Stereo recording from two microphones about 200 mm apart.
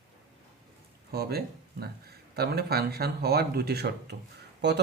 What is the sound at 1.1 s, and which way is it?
Speech, 50° right (ahead or behind).